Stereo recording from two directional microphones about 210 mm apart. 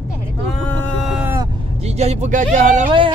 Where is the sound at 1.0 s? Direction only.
5° right (ahead or behind).